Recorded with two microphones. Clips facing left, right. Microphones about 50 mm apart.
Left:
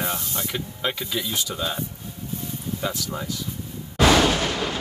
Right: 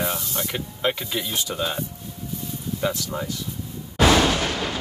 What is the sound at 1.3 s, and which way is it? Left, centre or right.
Speech, centre.